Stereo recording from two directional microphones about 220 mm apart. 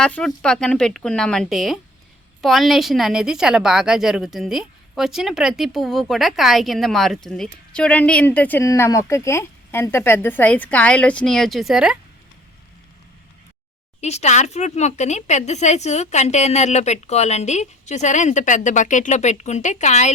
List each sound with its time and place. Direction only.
0.0 s a woman's voice: 5° left (ahead or behind)
14.0 s speech: 30° left (ahead or behind)